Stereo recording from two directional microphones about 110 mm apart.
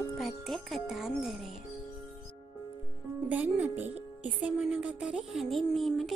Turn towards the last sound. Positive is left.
turn(degrees=0)  # may be behind; listen again after turning